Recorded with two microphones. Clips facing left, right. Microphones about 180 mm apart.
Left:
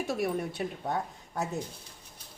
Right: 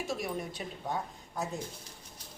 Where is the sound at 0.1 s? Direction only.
60° left (ahead or behind).